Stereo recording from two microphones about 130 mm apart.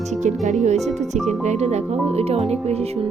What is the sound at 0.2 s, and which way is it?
Speech, 65° right (ahead or behind).